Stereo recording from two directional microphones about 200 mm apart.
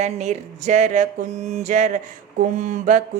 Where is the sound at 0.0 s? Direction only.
35° right (ahead or behind).